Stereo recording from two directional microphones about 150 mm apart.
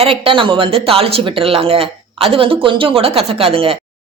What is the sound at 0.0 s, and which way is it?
Speech, 40° right (ahead or behind).